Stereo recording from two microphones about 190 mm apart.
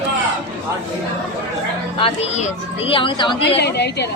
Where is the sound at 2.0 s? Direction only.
35° left (ahead or behind).